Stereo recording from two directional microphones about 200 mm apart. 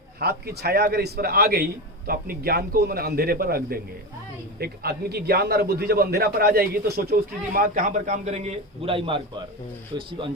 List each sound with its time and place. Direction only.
0.2 s a man's voice: 50° right (ahead or behind); by 10.1 s 25° right (ahead or behind)